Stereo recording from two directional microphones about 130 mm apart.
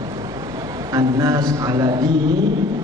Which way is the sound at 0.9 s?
25° right (ahead or behind).